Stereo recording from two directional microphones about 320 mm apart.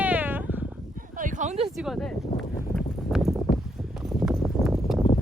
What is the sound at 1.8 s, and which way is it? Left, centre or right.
Speech, centre.